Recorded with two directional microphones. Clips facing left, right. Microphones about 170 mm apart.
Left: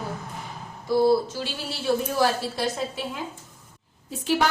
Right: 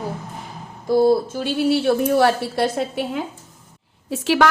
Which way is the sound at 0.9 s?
50° right (ahead or behind).